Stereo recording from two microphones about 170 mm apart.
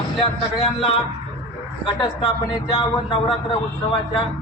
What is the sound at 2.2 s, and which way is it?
A man's voice, 25° left (ahead or behind).